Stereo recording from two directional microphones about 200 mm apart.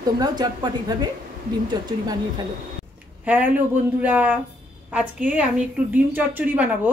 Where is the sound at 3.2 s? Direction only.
10° right (ahead or behind).